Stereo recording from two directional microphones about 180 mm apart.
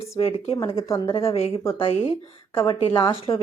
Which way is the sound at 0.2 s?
35° left (ahead or behind).